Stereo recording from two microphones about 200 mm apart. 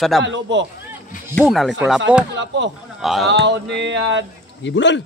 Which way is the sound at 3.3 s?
60° right (ahead or behind).